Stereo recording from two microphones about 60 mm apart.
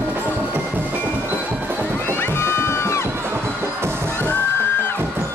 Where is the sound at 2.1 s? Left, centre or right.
Left.